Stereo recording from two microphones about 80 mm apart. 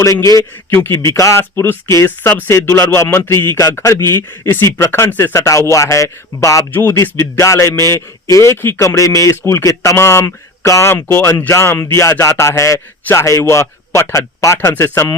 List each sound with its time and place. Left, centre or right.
0.0 s speech: left
0.7 s speech: left
0.9 s speech: left
6.7 s speech: left
9.4 s speech: left